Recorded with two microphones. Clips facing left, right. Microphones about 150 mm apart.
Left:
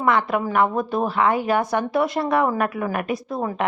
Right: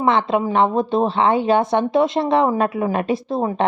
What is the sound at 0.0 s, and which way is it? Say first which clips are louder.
A woman's voice: right 3 dB; 25° right (ahead or behind).